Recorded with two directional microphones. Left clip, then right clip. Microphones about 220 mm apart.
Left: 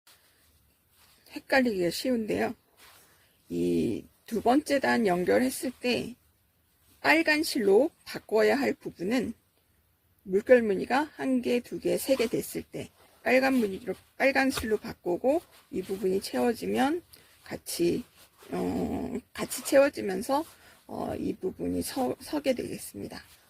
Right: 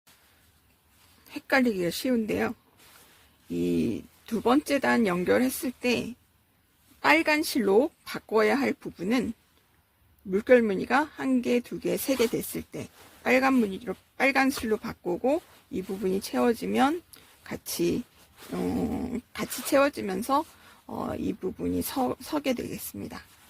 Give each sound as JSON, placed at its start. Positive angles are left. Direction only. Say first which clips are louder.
{"t": 1.3, "sound": "speech", "louder": "right 1 dB", "side_deg": -30}
{"t": 3.6, "sound": "speech", "louder": "even", "side_deg": -25}
{"t": 10.3, "sound": "speech", "louder": "right 1 dB", "side_deg": -30}